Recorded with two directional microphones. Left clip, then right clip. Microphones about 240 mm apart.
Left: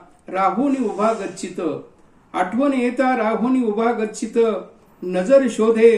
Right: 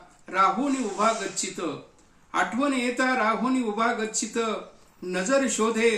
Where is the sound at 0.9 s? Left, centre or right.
Centre.